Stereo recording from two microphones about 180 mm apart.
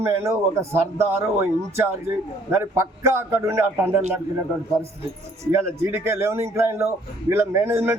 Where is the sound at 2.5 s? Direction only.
15° right (ahead or behind).